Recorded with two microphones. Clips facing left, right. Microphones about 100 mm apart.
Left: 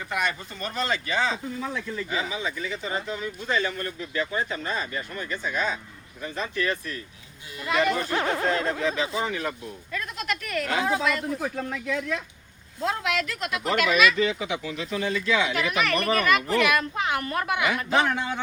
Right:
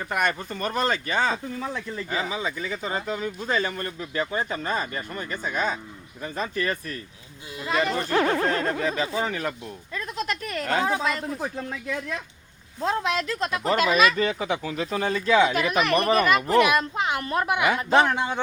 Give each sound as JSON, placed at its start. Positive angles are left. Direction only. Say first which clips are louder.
{"t": 0.1, "sound": "speech", "louder": "right 3 dB", "side_deg": -50}
{"t": 7.6, "sound": "speech", "louder": "left 1 dB", "side_deg": -30}
{"t": 8.2, "sound": "speech", "louder": "right 2 dB", "side_deg": -45}
{"t": 9.9, "sound": "speech", "louder": "right 1 dB", "side_deg": -35}
{"t": 12.8, "sound": "a woman's voice", "louder": "right 2 dB", "side_deg": -30}